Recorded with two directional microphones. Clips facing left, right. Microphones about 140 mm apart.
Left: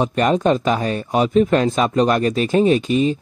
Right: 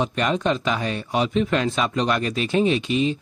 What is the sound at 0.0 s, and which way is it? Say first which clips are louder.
Speech: left 5 dB; 40° left (ahead or behind).